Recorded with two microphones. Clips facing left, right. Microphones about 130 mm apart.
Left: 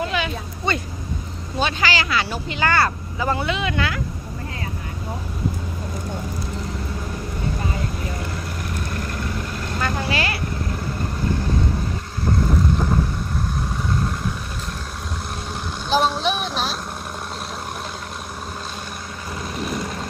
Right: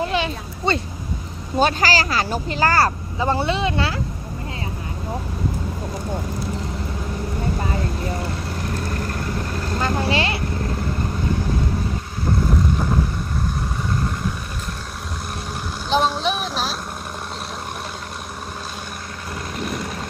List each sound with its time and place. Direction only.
0.1 s a sound: 30° right (ahead or behind)
1.5 s speech: 40° right (ahead or behind)
9.7 s speech: 30° right (ahead or behind)
12.7 s boat: centre (ahead or behind)
15.9 s vehicle: centre (ahead or behind)
19.5 s vehicle: centre (ahead or behind)